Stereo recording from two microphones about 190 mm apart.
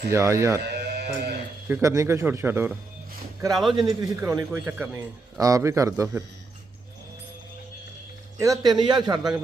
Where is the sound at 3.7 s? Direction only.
20° right (ahead or behind).